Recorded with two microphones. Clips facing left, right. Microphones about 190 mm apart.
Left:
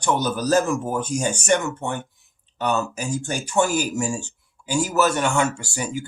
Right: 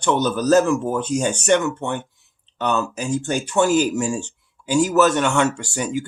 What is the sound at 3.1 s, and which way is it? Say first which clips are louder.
Speech: right 6 dB; 55° right (ahead or behind).